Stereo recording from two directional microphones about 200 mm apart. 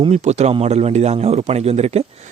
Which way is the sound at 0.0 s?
35° right (ahead or behind).